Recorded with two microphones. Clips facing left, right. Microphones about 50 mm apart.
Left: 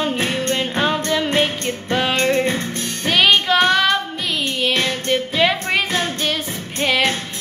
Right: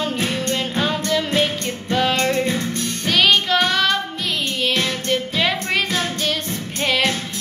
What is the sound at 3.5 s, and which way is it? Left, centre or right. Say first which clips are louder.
Child singing: left 3 dB; centre.